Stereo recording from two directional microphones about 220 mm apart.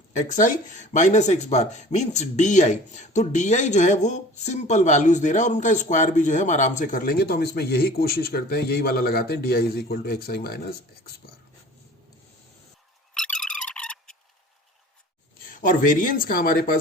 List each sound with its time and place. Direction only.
0.3 s speech: 35° left (ahead or behind)
13.1 s a sound: 5° left (ahead or behind)
15.4 s speech: 35° left (ahead or behind)